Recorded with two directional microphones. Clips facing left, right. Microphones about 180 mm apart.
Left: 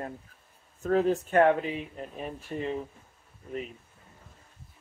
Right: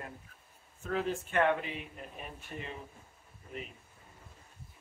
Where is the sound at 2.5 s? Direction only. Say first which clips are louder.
Left 10 dB; 25° left (ahead or behind).